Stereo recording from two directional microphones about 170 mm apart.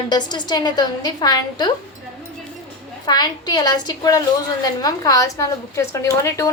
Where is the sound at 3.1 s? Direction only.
25° left (ahead or behind).